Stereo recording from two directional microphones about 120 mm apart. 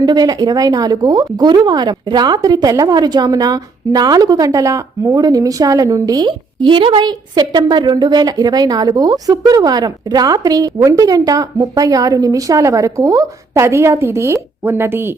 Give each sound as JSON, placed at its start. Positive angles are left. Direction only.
{"t": 0.0, "sound": "speech", "side_deg": -35}